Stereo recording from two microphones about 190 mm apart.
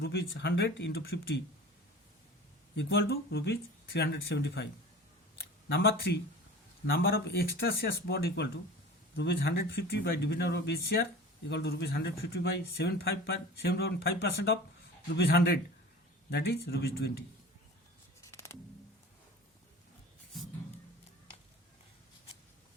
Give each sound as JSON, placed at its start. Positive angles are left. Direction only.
{"t": 0.0, "sound": "speech", "side_deg": 55}
{"t": 2.7, "sound": "speech", "side_deg": 55}
{"t": 15.1, "sound": "speech", "side_deg": 60}
{"t": 18.2, "sound": "music", "side_deg": 15}